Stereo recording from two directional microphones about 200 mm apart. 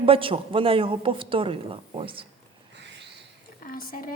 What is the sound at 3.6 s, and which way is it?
Speech, 45° left (ahead or behind).